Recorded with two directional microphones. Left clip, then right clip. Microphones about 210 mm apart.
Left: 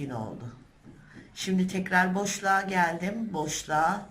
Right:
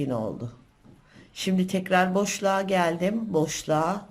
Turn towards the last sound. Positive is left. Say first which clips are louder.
# right 1 dB
turn(degrees=-40)  # may be behind; listen again after turning